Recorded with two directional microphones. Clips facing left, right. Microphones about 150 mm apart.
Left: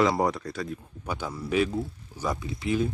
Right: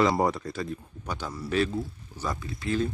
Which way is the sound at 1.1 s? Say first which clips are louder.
Left 2 dB; 10° left (ahead or behind).